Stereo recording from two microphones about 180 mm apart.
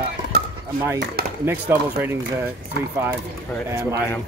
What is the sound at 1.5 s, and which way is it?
Speech, 10° right (ahead or behind).